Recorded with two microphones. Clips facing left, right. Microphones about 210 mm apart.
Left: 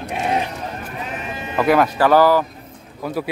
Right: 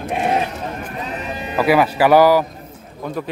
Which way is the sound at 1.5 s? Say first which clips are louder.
Right 1 dB; 5° right (ahead or behind).